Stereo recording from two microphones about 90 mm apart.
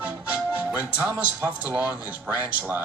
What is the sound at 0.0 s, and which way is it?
Music, 15° right (ahead or behind).